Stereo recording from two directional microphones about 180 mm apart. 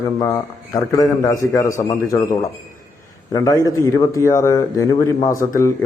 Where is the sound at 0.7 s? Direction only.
20° left (ahead or behind).